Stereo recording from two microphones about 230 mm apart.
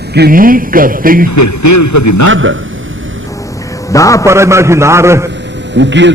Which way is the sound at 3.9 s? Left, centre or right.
Centre.